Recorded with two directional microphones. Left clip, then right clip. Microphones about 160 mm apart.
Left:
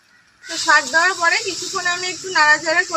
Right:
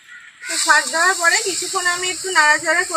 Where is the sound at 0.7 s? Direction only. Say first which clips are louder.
Left 1 dB; 15° right (ahead or behind).